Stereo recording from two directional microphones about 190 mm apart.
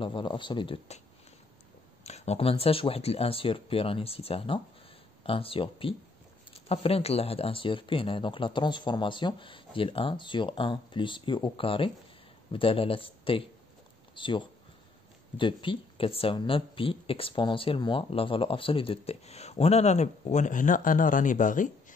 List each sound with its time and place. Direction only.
0.0 s speech: 25° left (ahead or behind)
2.0 s speech: 35° left (ahead or behind)